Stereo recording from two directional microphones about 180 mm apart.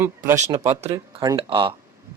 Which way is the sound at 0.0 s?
15° right (ahead or behind).